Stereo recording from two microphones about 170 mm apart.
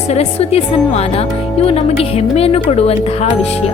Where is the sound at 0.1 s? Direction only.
40° left (ahead or behind).